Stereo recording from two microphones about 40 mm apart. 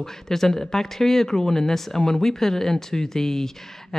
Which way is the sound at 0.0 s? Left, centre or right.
Centre.